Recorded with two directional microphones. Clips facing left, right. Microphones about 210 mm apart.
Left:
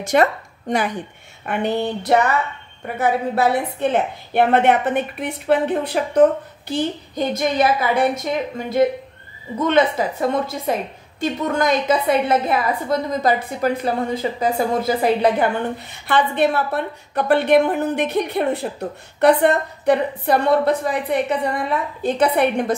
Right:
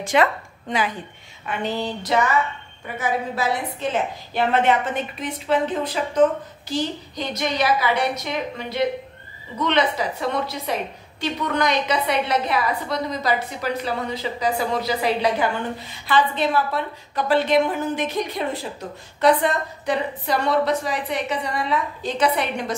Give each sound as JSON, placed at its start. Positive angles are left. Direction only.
{"t": 0.0, "sound": "speech", "side_deg": 45}
{"t": 1.4, "sound": "a woman's voice", "side_deg": 55}